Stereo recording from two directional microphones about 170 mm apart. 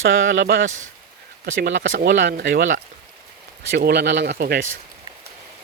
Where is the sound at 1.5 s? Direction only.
90° right.